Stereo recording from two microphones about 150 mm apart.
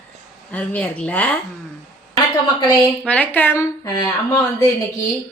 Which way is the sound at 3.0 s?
10° left (ahead or behind).